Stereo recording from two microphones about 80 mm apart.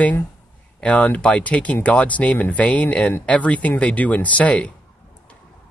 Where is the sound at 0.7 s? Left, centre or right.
Centre.